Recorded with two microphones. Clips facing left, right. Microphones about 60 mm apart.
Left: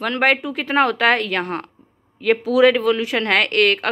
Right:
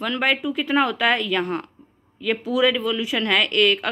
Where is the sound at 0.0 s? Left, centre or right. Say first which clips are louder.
Left 4 dB; left.